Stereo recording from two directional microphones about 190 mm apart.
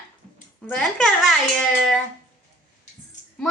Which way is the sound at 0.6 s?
5° left (ahead or behind).